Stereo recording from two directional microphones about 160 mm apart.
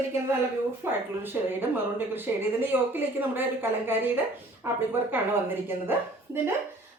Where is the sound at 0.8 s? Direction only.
15° right (ahead or behind).